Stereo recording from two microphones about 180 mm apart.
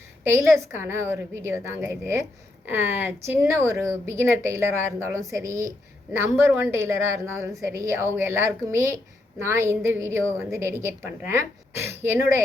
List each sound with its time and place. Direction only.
0.3 s speech: 15° right (ahead or behind)